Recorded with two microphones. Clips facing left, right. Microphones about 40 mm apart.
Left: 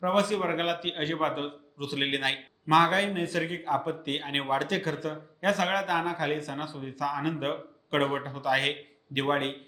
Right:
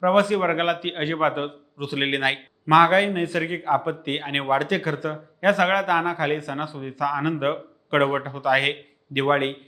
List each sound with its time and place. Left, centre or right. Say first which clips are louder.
0.1 s a man's voice: right 5 dB; centre
4.4 s a man's voice: right 7 dB; centre